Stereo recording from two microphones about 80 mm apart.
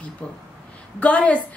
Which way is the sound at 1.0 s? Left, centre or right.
Centre.